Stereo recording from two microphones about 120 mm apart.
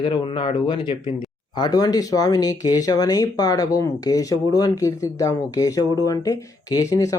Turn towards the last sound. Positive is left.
turn(degrees=30)  # may be behind; listen again after turning